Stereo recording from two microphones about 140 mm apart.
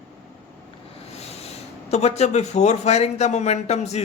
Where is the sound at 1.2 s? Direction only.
50° left (ahead or behind).